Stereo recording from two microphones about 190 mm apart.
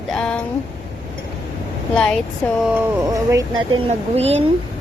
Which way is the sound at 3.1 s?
15° right (ahead or behind).